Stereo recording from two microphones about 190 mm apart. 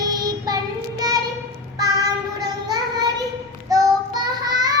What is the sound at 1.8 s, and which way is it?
Child singing, 20° right (ahead or behind).